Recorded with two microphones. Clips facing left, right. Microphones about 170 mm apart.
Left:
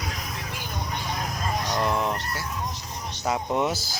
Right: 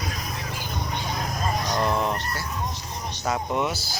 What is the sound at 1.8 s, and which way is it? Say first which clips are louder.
Fowl: right 1 dB; centre (ahead or behind).